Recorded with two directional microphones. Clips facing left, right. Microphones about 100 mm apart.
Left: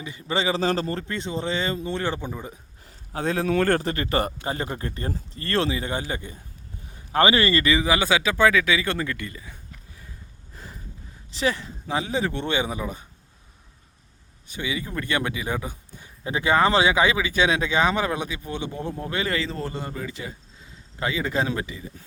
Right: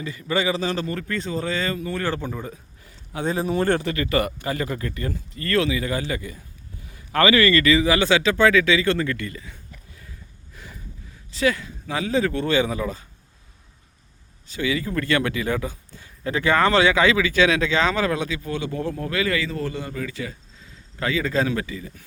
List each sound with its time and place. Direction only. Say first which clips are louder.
0.0 s a man's voice: right 2 dB; 25° left (ahead or behind)
2.8 s a sound: even; 40° left (ahead or behind)
3.2 s speech: even; 85° left
3.7 s a man's voice: right 1 dB; 40° left (ahead or behind); by 9.6 s 20° left (ahead or behind)
10.5 s a sound: even; 30° left (ahead or behind)
11.3 s a man's voice: right 3 dB; 25° left (ahead or behind)
14.5 s a man's voice: right 5 dB; 15° left (ahead or behind)